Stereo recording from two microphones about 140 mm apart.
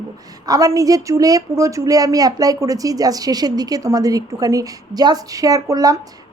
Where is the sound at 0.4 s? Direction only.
25° right (ahead or behind).